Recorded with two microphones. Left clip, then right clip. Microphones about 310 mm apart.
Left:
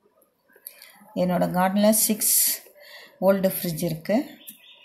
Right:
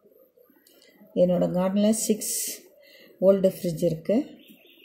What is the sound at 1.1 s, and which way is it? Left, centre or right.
Speech, left.